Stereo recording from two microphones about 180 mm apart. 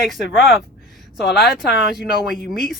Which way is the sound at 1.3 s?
Centre (ahead or behind).